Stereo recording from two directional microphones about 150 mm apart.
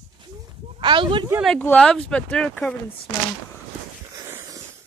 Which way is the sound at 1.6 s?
10° left (ahead or behind).